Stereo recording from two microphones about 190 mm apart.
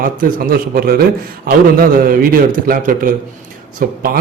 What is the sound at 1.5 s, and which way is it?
A man's voice, 50° right (ahead or behind).